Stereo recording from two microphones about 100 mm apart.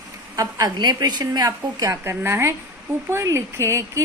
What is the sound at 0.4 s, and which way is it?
Speech, 40° right (ahead or behind).